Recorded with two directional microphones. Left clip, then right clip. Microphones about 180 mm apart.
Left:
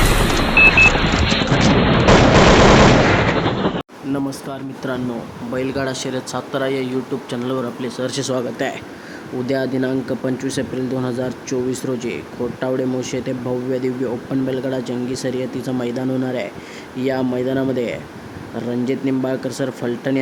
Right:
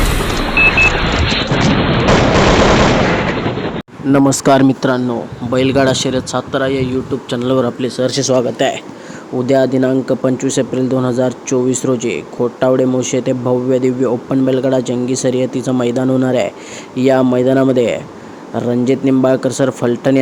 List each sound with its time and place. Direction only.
0.0 s music: centre (ahead or behind)
4.3 s speech: 60° right (ahead or behind)
5.5 s speech: 40° right (ahead or behind); by 6.9 s 20° right (ahead or behind)
7.3 s speech: 35° right (ahead or behind); by 20.1 s 20° right (ahead or behind)